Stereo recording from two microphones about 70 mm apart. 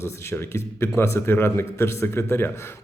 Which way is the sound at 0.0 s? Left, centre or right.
Left.